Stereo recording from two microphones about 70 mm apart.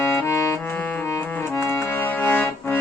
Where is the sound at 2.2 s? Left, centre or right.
Left.